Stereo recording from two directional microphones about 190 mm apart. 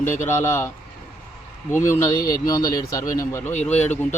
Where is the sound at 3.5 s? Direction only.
35° left (ahead or behind).